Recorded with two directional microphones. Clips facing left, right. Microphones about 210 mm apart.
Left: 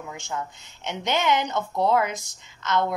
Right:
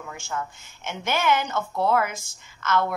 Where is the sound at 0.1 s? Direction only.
15° left (ahead or behind).